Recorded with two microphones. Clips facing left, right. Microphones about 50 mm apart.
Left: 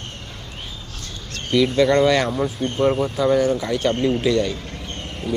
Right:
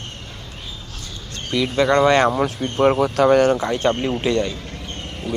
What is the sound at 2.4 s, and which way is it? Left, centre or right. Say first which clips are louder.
Speech: right 2 dB; right.